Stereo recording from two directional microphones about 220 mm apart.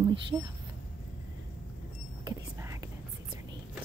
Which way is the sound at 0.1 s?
20° right (ahead or behind).